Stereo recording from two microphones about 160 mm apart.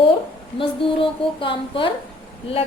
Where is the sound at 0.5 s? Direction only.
35° left (ahead or behind).